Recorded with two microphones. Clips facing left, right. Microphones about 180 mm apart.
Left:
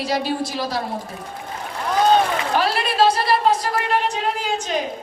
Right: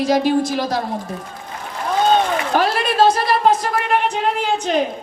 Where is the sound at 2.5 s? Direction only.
50° right (ahead or behind).